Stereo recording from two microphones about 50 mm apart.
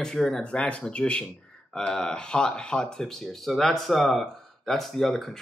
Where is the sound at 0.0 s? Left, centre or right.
Centre.